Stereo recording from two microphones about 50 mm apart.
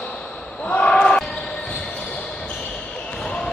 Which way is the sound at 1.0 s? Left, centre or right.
Centre.